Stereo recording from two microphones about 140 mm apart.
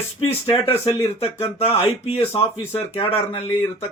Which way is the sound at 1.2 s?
40° left (ahead or behind).